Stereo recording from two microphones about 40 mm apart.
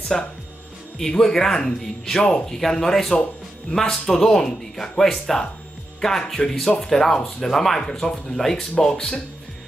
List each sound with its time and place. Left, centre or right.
0.1 s speech: centre